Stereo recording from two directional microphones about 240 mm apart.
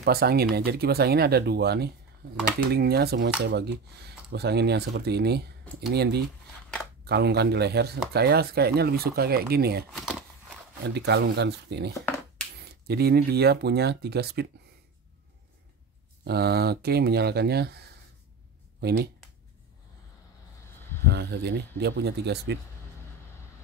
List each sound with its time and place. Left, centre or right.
0.0 s speech: right
7.1 s speech: right
9.9 s a sound: centre
10.8 s speech: right
16.3 s speech: right
21.1 s speech: right